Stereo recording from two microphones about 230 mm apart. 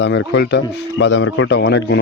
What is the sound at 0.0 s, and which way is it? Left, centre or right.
Speech, left.